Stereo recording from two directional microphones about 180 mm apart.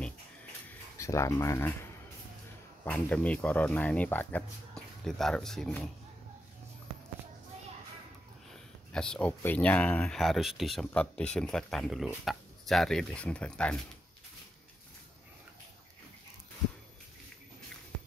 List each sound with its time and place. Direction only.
0.9 s speech: 15° left (ahead or behind)
2.8 s speech: 10° left (ahead or behind)
8.9 s speech: 5° left (ahead or behind)